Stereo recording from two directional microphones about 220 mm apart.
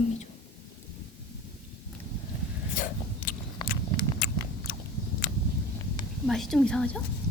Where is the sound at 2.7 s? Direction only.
35° left (ahead or behind).